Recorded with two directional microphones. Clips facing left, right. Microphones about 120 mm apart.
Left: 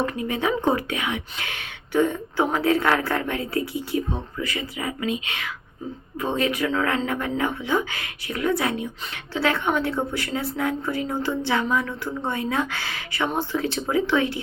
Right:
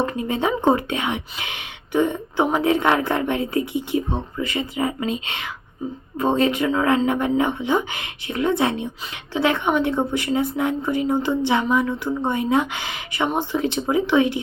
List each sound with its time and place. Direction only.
0.0 s a woman's voice: 30° right (ahead or behind)